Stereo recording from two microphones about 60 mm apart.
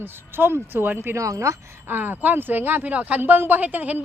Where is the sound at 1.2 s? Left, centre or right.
Right.